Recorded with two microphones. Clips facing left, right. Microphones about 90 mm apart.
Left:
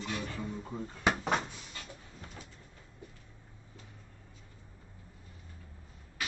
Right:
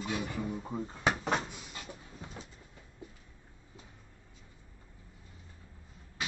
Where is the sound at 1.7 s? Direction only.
15° right (ahead or behind).